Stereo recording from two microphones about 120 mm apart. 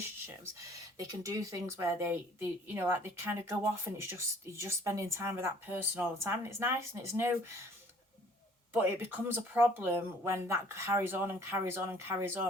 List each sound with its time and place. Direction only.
0.9 s a woman's voice: 30° right (ahead or behind)
8.7 s a woman's voice: 15° right (ahead or behind)